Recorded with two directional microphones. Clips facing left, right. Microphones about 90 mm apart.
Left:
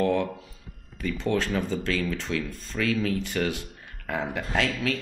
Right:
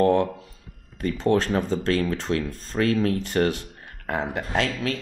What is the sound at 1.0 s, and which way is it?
Speech, 35° right (ahead or behind).